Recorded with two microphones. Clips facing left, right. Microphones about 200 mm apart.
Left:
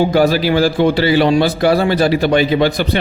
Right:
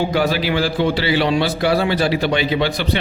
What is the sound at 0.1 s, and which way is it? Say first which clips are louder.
A man's voice: left 5 dB; 40° left (ahead or behind).